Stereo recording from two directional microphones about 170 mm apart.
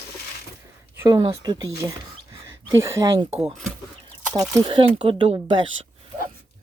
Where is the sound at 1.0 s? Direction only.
20° right (ahead or behind).